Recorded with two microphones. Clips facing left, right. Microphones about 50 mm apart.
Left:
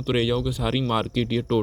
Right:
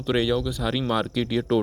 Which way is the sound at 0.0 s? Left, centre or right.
Centre.